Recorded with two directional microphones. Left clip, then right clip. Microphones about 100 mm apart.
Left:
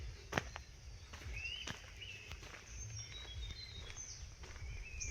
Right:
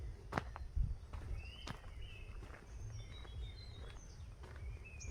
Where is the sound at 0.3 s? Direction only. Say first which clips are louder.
Left 2 dB; 20° left (ahead or behind).